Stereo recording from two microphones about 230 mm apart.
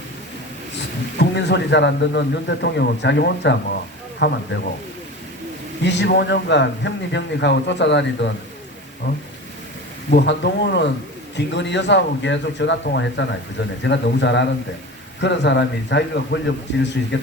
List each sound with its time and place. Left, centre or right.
1.2 s speech: left
5.8 s speech: left